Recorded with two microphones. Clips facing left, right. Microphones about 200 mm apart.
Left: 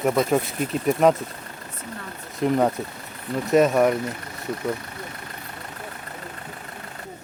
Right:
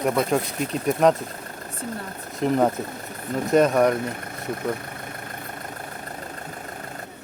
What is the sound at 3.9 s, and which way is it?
Vehicle, 50° right (ahead or behind).